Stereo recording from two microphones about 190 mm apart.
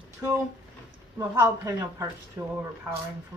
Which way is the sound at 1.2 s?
15° right (ahead or behind).